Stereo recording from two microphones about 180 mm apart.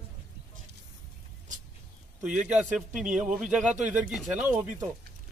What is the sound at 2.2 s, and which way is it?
A man's voice, 5° right (ahead or behind).